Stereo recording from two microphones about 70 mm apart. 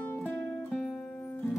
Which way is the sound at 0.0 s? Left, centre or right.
Left.